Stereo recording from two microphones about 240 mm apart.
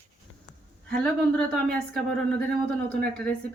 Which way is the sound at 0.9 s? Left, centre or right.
Centre.